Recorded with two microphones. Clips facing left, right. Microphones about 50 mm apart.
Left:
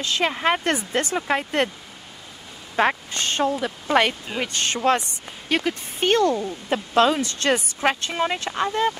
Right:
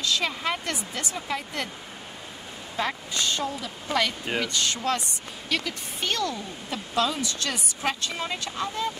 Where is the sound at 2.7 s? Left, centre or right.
Left.